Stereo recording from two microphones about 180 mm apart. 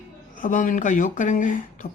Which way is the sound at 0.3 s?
45° left (ahead or behind).